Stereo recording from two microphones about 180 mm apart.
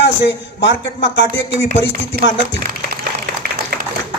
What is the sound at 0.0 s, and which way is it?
A man's voice, 75° left (ahead or behind).